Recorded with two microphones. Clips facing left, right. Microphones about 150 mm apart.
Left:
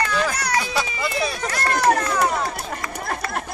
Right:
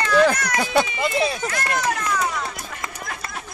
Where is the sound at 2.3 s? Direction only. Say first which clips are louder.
Left 4 dB; 35° left (ahead or behind).